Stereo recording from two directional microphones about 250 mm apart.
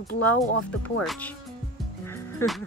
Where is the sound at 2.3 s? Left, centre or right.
Centre.